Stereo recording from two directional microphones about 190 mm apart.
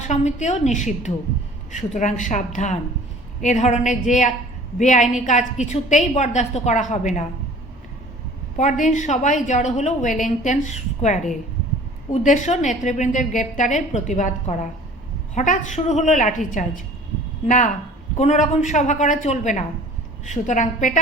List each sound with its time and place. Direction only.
0.0 s a woman's voice: 40° left (ahead or behind)
8.5 s a woman's voice: 40° left (ahead or behind)
18.2 s a woman's voice: 40° left (ahead or behind)